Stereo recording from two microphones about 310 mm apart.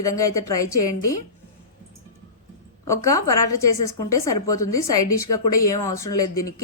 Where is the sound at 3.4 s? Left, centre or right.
Left.